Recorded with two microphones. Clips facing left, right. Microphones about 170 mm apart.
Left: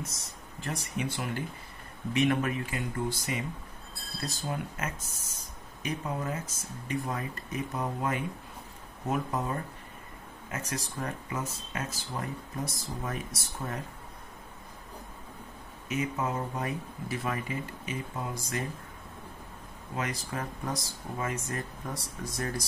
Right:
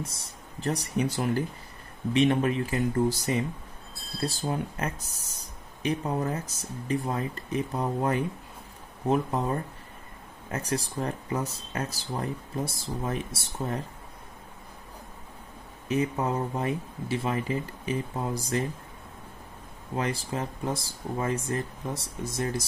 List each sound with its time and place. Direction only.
0.0 s speech: 30° right (ahead or behind)
15.9 s speech: 35° right (ahead or behind)
20.0 s speech: 25° right (ahead or behind)